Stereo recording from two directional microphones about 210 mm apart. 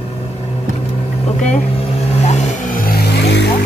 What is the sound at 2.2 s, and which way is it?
Vehicle, 35° left (ahead or behind).